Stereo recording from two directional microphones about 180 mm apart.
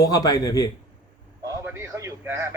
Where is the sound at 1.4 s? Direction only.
15° right (ahead or behind).